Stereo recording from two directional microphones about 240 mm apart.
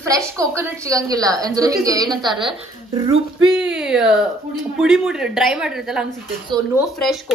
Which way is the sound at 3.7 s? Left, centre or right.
Centre.